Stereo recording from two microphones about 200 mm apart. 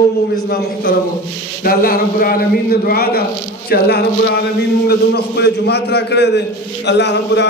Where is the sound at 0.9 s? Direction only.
45° left (ahead or behind).